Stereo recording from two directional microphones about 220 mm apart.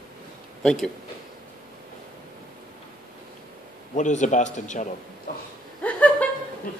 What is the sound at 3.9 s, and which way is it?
Speech, 35° left (ahead or behind).